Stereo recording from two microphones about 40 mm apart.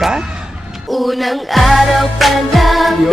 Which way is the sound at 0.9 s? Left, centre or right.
Centre.